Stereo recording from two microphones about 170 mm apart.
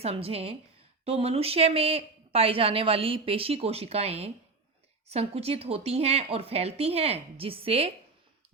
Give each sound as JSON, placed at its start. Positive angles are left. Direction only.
{"t": 0.0, "sound": "a woman's voice", "side_deg": -35}